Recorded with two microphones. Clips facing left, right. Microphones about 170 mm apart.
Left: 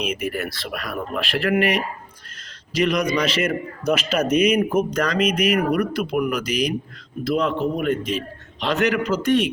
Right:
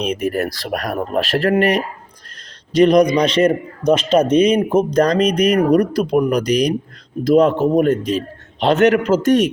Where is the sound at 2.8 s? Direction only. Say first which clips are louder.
Right 8 dB; 35° right (ahead or behind).